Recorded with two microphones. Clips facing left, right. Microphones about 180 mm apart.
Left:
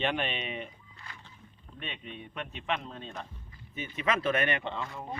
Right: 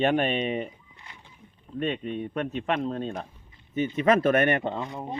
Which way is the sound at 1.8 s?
45° right (ahead or behind).